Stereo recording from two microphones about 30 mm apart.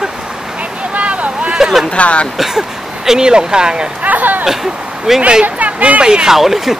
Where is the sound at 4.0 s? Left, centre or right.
Right.